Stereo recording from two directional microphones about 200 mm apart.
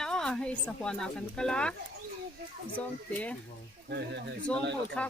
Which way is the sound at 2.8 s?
5° left (ahead or behind).